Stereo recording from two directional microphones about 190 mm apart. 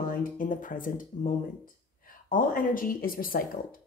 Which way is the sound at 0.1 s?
45° left (ahead or behind).